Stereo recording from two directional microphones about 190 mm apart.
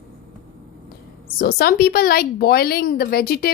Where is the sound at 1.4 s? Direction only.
55° left (ahead or behind).